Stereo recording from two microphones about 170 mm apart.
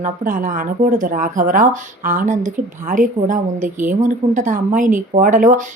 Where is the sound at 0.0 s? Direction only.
55° right (ahead or behind).